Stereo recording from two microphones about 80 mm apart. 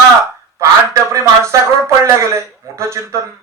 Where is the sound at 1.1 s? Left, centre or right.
Right.